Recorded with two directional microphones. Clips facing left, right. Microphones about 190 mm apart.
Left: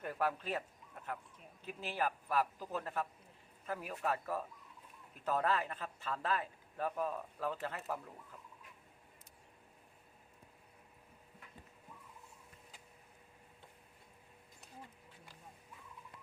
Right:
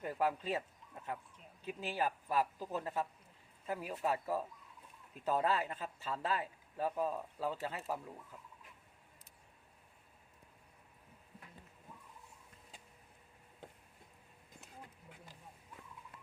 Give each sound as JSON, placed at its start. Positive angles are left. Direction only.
{"t": 0.0, "sound": "a man's voice", "side_deg": -15}